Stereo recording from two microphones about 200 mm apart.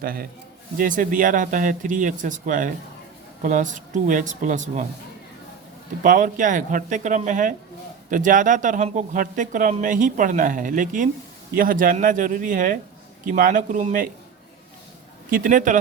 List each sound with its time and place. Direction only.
0.0 s speech: 45° right (ahead or behind)
6.0 s speech: 40° right (ahead or behind)
15.3 s speech: 45° right (ahead or behind)